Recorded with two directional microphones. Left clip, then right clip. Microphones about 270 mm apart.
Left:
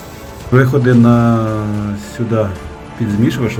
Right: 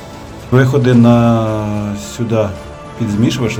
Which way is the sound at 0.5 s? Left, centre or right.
Centre.